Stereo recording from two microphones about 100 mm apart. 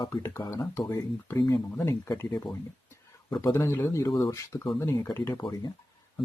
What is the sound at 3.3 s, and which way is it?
Speech, 40° left (ahead or behind).